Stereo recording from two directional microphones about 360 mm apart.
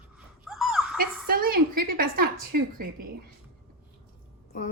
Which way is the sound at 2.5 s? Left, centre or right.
Right.